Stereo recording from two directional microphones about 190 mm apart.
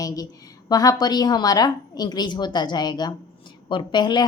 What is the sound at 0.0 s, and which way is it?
A woman's voice, 20° left (ahead or behind).